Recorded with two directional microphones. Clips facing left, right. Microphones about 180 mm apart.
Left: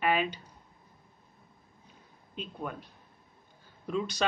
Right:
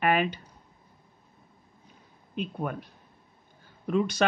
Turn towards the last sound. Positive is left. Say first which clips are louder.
# right 6 dB
turn(degrees=-55)  # may be behind; listen again after turning